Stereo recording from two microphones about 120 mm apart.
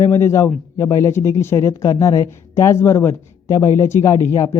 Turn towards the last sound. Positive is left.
turn(degrees=25)  # may be behind; listen again after turning